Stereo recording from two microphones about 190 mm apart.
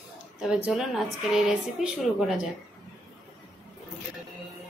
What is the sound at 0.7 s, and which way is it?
A woman's voice, centre (ahead or behind).